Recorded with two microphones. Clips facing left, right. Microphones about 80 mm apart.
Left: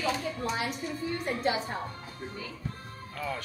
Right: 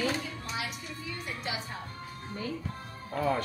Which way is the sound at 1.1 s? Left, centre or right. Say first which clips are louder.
Left 8 dB; left.